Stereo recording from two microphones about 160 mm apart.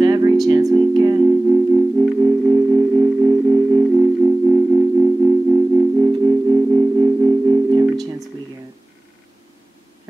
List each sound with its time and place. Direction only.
0.0 s music: 25° right (ahead or behind)